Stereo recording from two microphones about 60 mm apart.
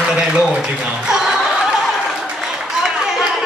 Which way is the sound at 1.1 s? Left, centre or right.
Centre.